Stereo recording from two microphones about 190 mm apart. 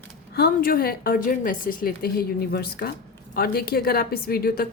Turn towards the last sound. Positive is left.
turn(degrees=50)  # may be behind; listen again after turning